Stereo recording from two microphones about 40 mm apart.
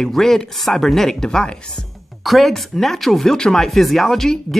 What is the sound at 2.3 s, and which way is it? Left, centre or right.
Speech, centre.